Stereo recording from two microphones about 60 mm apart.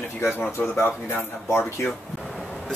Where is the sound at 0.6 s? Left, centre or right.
Left.